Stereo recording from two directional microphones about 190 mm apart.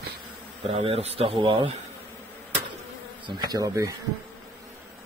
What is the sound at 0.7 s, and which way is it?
Speech, 30° right (ahead or behind).